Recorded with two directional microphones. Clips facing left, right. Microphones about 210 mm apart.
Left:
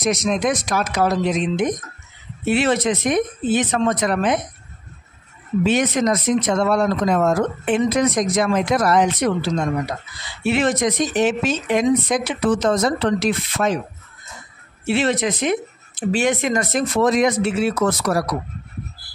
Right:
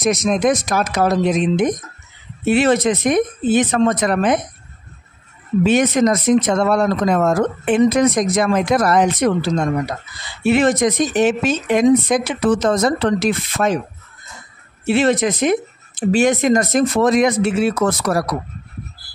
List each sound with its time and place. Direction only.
0.0 s speech: 50° right (ahead or behind)
5.7 s speech: 50° right (ahead or behind)
10.4 s speech: 45° right (ahead or behind)
14.9 s speech: 45° right (ahead or behind)